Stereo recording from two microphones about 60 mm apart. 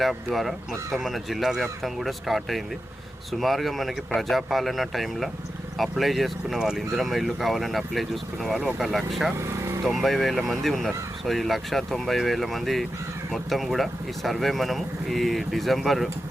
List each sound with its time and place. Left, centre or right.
0.0 s speech: centre
9.4 s vehicle: right
9.8 s speech: centre